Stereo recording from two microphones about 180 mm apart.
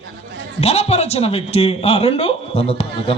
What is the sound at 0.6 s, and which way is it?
Speech, 35° left (ahead or behind).